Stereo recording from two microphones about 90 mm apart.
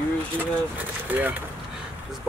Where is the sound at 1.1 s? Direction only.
20° right (ahead or behind).